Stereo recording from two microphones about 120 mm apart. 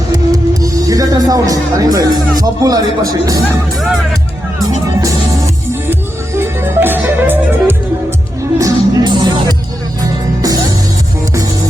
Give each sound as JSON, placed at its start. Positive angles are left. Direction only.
{"t": 0.1, "sound": "music", "side_deg": -30}
{"t": 1.9, "sound": "speech", "side_deg": -30}
{"t": 4.9, "sound": "music", "side_deg": -25}
{"t": 8.5, "sound": "music", "side_deg": -30}